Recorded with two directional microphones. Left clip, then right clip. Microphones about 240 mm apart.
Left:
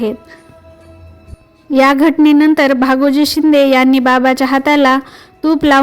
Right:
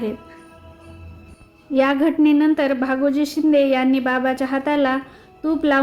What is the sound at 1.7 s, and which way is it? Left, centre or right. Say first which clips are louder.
A woman's voice: left 8 dB; left.